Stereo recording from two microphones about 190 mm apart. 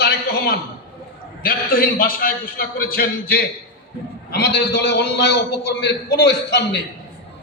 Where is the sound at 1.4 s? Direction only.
50° left (ahead or behind).